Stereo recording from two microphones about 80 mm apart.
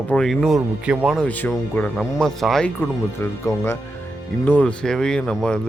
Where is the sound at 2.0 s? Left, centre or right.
Centre.